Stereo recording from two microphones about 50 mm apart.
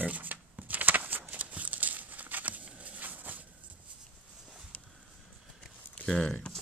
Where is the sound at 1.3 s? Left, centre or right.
Right.